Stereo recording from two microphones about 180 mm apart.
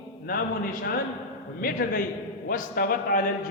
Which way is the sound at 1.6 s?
55° left (ahead or behind).